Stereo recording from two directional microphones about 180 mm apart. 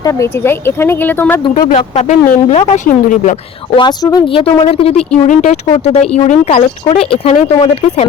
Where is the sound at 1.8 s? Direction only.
35° left (ahead or behind).